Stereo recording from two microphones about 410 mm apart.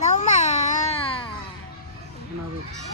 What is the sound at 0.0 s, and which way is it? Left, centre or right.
Music, centre.